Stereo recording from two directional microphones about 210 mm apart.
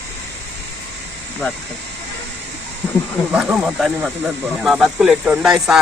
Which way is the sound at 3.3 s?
5° right (ahead or behind).